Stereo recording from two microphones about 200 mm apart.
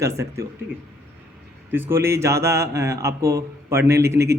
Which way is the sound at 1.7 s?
10° right (ahead or behind).